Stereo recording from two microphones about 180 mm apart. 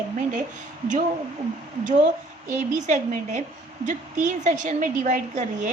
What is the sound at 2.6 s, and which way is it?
A woman's voice, 40° right (ahead or behind).